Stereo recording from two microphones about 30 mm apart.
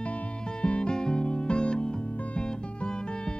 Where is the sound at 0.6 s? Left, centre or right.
Left.